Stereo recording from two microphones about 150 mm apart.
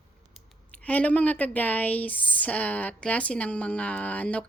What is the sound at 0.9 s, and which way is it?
Speech, 10° left (ahead or behind).